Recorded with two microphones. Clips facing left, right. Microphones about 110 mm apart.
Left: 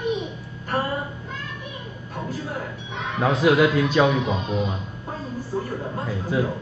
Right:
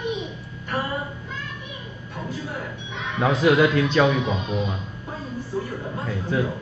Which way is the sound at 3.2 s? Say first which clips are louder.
Even; 5° left (ahead or behind).